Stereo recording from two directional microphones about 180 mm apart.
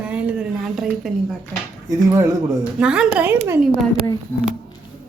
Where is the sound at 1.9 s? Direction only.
20° right (ahead or behind).